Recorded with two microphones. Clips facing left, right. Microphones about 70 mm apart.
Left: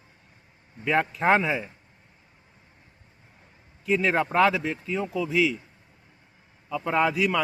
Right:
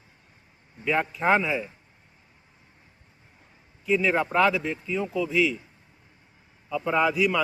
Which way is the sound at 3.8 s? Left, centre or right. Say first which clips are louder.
Even; left.